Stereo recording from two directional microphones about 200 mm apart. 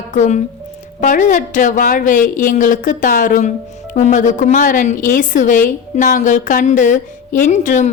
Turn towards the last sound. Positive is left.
turn(degrees=40)  # may be behind; listen again after turning